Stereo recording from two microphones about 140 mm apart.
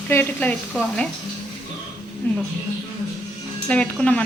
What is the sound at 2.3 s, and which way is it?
Frying, 15° left (ahead or behind).